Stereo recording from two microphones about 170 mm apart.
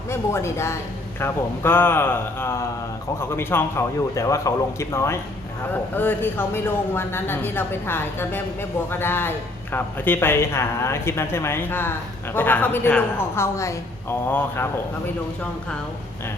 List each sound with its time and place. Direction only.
0.1 s speech: 15° left (ahead or behind)